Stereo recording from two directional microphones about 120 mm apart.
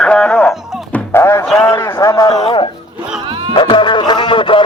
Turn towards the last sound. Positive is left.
turn(degrees=45)  # may be behind; listen again after turning